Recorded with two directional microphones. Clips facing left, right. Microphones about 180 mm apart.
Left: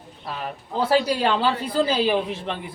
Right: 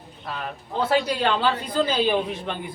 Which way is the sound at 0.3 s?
5° left (ahead or behind).